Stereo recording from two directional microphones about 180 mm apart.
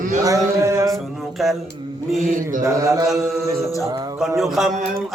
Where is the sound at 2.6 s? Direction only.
15° right (ahead or behind).